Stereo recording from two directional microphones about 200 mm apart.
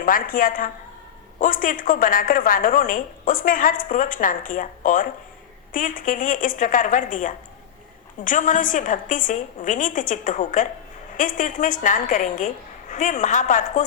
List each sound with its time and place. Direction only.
0.0 s a woman's voice: 45° left (ahead or behind)